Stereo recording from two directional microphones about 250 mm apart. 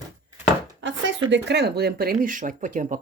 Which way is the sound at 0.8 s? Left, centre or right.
Right.